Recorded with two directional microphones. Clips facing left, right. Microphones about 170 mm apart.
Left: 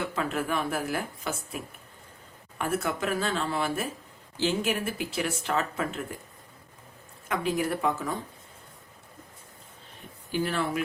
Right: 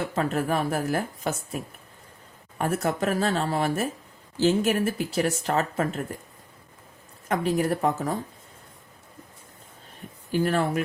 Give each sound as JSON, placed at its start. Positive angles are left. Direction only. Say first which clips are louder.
{"t": 0.1, "sound": "speech", "louder": "right 4 dB", "side_deg": -40}
{"t": 7.3, "sound": "speech", "louder": "right 4 dB", "side_deg": -40}
{"t": 10.3, "sound": "speech", "louder": "right 4 dB", "side_deg": -45}